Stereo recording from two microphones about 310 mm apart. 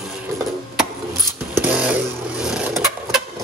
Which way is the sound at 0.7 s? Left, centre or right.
Centre.